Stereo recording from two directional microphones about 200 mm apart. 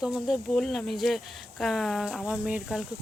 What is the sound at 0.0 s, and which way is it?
Speech, centre (ahead or behind).